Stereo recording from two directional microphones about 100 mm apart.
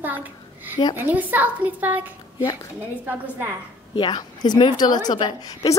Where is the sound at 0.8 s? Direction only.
55° left (ahead or behind).